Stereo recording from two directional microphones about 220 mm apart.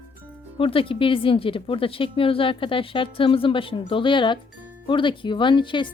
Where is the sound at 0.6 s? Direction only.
25° left (ahead or behind).